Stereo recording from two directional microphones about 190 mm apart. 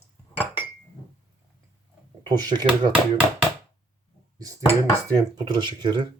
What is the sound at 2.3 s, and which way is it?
Speech, 20° right (ahead or behind).